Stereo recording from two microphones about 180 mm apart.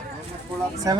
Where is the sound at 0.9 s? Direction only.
20° right (ahead or behind).